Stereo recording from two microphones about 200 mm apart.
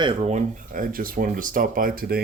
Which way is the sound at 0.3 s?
40° right (ahead or behind).